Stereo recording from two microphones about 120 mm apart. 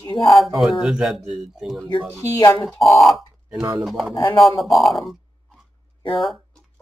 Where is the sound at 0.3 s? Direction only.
Centre (ahead or behind).